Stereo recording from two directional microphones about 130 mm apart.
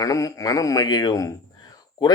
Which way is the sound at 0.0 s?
25° left (ahead or behind).